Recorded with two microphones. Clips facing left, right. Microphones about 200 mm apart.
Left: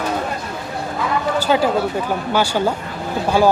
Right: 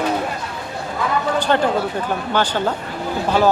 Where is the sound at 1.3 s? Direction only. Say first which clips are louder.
Left 2 dB; 5° left (ahead or behind).